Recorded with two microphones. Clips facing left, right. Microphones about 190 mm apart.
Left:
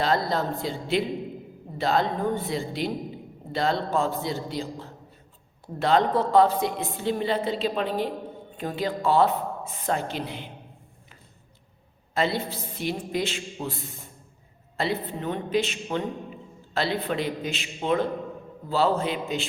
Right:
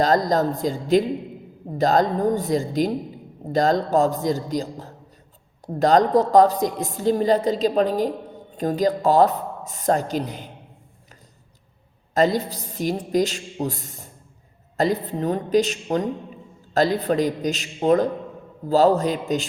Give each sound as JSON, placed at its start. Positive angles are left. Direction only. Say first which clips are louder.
{"t": 0.0, "sound": "a woman's voice", "louder": "right 6 dB", "side_deg": -40}
{"t": 12.1, "sound": "a woman's voice", "louder": "right 6 dB", "side_deg": -40}